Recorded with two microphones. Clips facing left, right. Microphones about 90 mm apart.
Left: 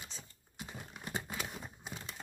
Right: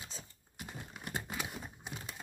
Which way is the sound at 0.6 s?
5° right (ahead or behind).